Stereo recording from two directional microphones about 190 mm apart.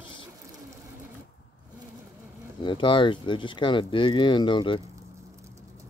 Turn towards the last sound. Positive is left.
turn(degrees=25)  # may be behind; listen again after turning